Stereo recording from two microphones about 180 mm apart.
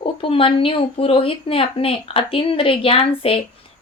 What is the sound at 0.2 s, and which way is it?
Speech, 30° left (ahead or behind).